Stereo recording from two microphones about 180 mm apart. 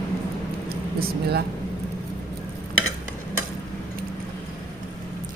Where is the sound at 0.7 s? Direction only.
60° right (ahead or behind).